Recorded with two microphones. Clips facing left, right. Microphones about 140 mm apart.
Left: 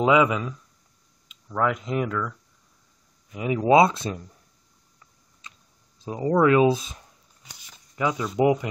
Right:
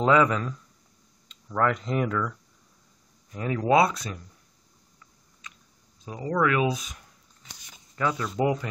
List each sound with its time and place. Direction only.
0.0 s a man's voice: 10° left (ahead or behind)
3.3 s speech: 15° left (ahead or behind)
5.4 s typing: 30° left (ahead or behind)
6.0 s speech: 30° left (ahead or behind)
7.9 s a man's voice: 15° left (ahead or behind)